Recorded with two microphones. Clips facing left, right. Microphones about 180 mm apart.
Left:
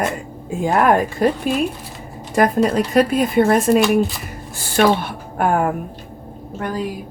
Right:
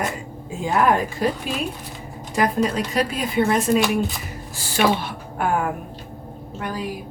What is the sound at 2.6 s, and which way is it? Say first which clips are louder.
A woman's voice: left 6 dB; 55° left (ahead or behind).